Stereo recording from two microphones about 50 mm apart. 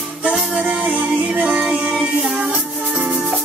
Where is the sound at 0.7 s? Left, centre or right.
Right.